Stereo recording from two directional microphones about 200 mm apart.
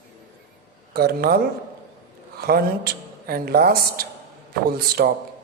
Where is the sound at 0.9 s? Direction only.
50° right (ahead or behind).